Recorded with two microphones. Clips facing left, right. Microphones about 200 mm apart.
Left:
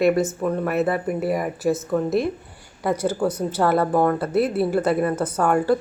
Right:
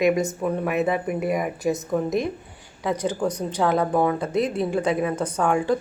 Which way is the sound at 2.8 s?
10° left (ahead or behind).